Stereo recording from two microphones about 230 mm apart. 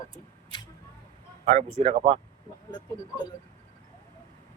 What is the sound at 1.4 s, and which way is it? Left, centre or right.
Speech, right.